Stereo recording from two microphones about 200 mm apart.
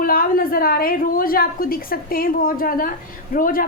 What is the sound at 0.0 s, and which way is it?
A woman's voice, 45° left (ahead or behind).